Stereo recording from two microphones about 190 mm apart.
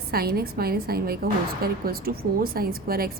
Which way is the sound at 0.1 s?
55° right (ahead or behind).